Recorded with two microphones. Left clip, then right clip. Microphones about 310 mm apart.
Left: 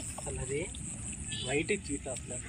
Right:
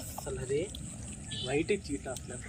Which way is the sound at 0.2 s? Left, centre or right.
Centre.